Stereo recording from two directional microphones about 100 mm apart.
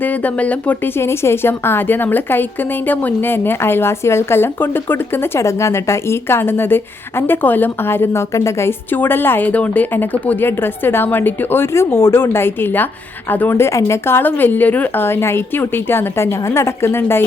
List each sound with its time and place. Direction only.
0.0 s a woman's voice: 15° left (ahead or behind)